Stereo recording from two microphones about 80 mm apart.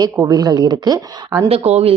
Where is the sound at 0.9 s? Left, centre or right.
Right.